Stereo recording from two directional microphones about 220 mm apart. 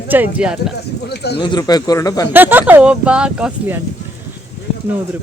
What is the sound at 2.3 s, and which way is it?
Speech, 10° right (ahead or behind).